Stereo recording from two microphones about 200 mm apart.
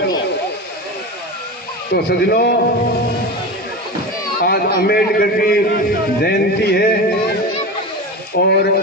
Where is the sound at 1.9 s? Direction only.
55° left (ahead or behind).